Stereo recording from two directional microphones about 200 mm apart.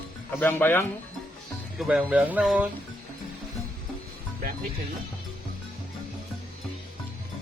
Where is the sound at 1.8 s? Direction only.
5° right (ahead or behind).